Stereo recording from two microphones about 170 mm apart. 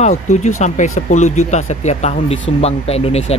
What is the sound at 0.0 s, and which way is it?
Speech, 45° left (ahead or behind).